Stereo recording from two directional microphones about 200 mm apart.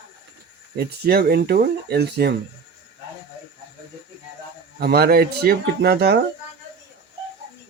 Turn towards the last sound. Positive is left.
turn(degrees=-55)  # may be behind; listen again after turning